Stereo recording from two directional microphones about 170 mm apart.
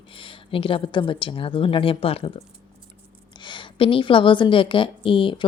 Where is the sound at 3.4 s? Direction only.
30° left (ahead or behind).